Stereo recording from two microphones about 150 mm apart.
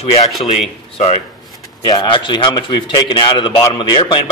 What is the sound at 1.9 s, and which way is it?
Speech, 35° left (ahead or behind).